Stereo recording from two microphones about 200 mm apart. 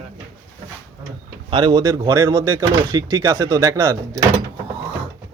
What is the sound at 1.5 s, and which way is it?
Speech, 20° right (ahead or behind).